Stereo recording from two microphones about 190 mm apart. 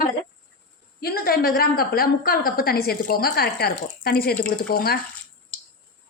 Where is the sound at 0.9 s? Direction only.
55° left (ahead or behind).